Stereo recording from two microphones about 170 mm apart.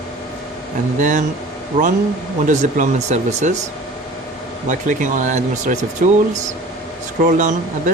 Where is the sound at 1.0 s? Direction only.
50° right (ahead or behind).